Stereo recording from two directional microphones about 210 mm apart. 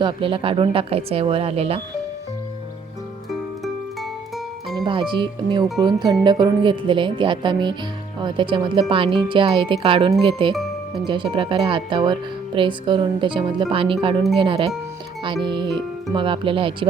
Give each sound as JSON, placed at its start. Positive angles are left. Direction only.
{"t": 0.0, "sound": "a woman's voice", "side_deg": -25}
{"t": 4.9, "sound": "a woman's voice", "side_deg": -25}
{"t": 10.5, "sound": "music", "side_deg": 0}
{"t": 11.0, "sound": "a woman's voice", "side_deg": -25}